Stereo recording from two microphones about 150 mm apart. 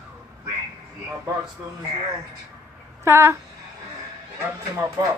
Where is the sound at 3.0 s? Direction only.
15° right (ahead or behind).